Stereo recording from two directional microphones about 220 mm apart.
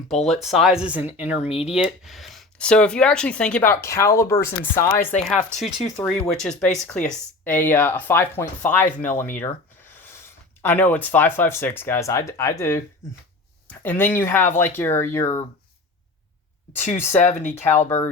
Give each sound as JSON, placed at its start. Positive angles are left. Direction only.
{"t": 0.3, "sound": "speech", "side_deg": 0}
{"t": 10.6, "sound": "speech", "side_deg": 10}
{"t": 17.2, "sound": "speech", "side_deg": 30}
{"t": 17.8, "sound": "speech", "side_deg": 10}